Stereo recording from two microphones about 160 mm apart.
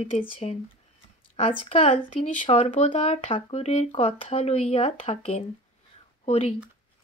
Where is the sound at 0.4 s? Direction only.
45° left (ahead or behind).